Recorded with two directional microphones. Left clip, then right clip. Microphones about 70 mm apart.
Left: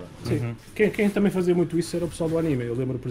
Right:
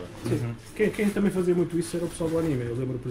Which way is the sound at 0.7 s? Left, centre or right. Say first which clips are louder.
Left 3 dB; left.